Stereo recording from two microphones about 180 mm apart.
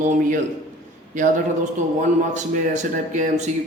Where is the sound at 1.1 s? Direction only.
45° right (ahead or behind).